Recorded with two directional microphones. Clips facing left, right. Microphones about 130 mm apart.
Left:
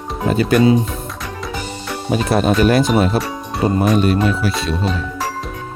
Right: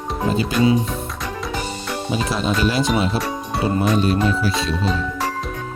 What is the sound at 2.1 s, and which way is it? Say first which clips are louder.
Speech: left 7 dB; 55° left (ahead or behind).